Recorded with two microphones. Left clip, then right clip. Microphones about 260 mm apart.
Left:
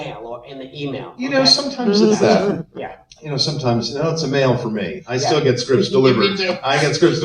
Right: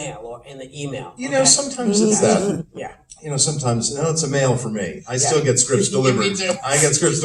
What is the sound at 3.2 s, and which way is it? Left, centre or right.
A man's voice, right.